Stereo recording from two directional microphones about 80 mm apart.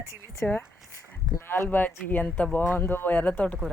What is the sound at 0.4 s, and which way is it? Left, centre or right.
Speech, centre.